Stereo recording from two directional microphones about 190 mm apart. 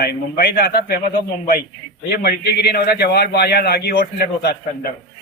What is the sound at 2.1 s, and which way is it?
A man's voice, 55° left (ahead or behind).